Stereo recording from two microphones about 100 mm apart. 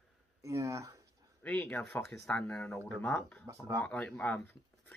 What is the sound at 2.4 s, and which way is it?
Speech, 15° left (ahead or behind).